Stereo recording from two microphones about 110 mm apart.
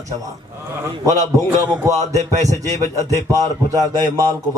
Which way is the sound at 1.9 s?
90° right.